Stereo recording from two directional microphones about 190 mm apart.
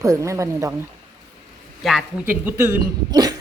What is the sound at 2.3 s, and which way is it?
Speech, 10° right (ahead or behind).